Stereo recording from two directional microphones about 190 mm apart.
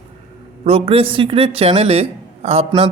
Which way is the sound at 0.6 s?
30° right (ahead or behind).